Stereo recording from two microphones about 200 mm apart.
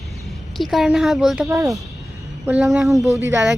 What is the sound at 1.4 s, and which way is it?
Speech, 15° right (ahead or behind).